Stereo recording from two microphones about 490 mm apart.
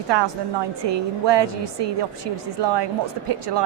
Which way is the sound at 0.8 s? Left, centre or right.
Right.